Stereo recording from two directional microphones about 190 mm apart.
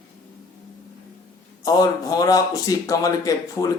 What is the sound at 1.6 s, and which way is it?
Speech, 20° left (ahead or behind).